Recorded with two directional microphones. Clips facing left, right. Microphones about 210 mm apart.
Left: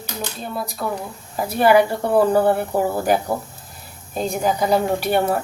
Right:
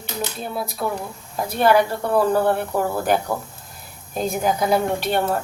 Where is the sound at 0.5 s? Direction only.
Centre (ahead or behind).